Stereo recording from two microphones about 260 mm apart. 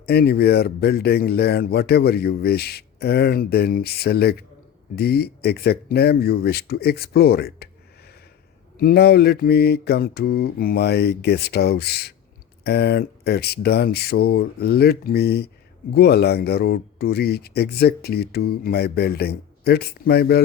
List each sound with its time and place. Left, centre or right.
0.0 s speech: left